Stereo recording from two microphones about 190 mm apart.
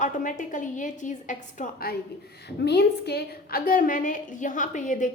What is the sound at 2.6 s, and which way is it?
A woman's voice, 60° left (ahead or behind).